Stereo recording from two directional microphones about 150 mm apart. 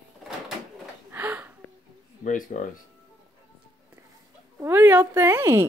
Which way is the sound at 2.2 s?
60° left (ahead or behind).